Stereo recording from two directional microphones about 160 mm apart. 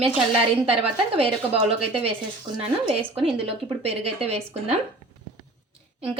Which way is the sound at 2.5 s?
35° right (ahead or behind).